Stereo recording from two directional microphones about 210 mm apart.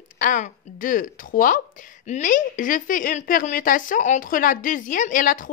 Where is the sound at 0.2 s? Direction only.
40° left (ahead or behind).